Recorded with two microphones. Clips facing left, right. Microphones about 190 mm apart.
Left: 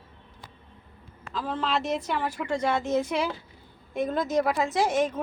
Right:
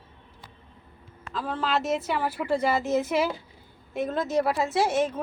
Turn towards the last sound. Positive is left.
turn(degrees=-5)  # may be behind; listen again after turning